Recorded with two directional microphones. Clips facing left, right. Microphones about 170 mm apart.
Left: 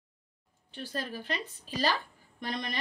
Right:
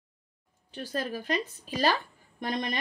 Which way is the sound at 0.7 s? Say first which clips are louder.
Right 4 dB; 45° right (ahead or behind).